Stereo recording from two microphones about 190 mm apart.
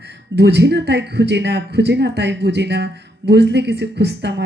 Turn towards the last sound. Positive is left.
turn(degrees=-65)  # may be behind; listen again after turning